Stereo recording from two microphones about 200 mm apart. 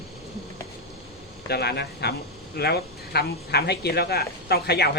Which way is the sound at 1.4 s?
55° left (ahead or behind).